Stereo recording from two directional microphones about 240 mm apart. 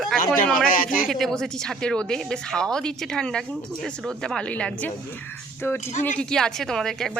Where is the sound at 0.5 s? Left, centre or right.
Left.